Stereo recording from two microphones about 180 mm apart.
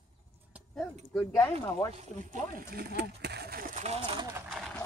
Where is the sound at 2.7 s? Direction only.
60° right (ahead or behind).